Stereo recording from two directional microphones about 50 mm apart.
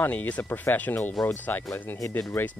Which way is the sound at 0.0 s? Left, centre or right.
Left.